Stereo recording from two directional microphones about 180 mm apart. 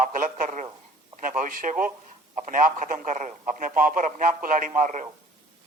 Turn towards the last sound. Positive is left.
turn(degrees=-45)  # may be behind; listen again after turning